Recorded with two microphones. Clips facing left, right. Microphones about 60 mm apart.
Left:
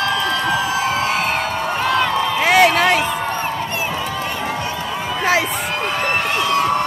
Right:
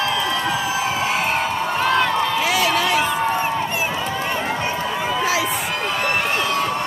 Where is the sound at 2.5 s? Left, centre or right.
Left.